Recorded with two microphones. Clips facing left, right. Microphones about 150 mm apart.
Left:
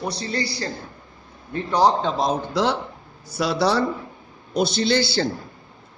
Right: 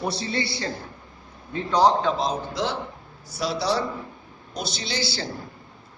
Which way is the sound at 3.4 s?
60° left (ahead or behind).